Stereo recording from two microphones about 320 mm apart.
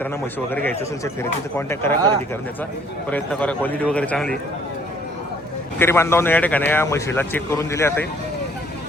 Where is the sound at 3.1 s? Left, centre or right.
Centre.